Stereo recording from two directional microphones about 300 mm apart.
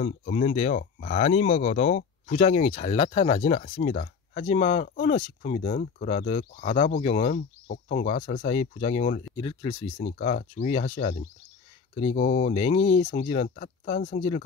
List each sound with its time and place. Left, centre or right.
0.0 s speech: left
7.3 s speech: left
12.2 s speech: left